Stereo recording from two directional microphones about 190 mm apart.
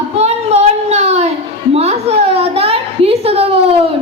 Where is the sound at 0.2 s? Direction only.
35° right (ahead or behind).